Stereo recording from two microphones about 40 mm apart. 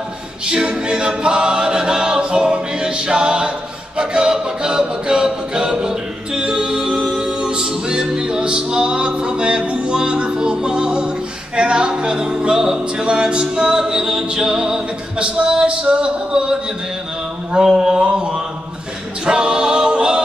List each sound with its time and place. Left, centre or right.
0.5 s a capella: right
11.5 s music: right
19.2 s a capella: right